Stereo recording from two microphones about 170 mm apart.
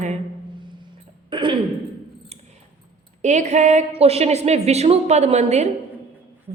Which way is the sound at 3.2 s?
45° right (ahead or behind).